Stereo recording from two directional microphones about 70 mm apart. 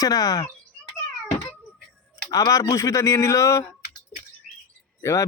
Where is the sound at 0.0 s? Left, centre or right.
Left.